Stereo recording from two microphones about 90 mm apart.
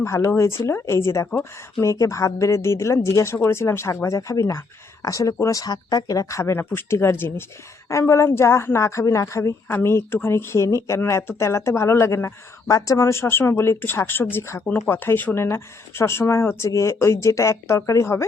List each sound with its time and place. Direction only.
0.0 s speech: 30° left (ahead or behind)